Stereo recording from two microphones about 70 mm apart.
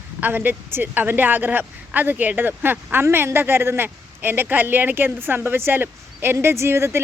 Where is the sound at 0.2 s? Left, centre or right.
Right.